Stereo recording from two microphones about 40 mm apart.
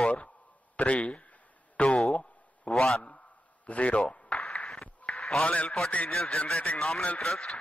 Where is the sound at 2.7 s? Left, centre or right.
Centre.